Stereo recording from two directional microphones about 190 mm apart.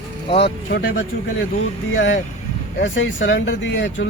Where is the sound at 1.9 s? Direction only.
90° left.